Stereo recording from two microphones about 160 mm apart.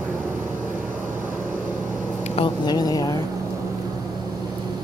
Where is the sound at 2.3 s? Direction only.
30° left (ahead or behind).